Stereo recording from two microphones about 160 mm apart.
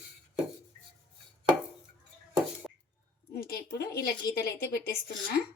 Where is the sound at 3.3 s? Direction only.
75° left (ahead or behind).